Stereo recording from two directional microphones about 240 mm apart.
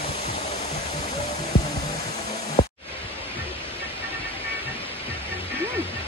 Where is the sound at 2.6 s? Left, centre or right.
Centre.